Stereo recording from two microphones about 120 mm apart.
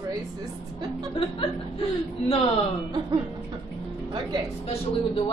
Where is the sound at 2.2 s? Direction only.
50° left (ahead or behind).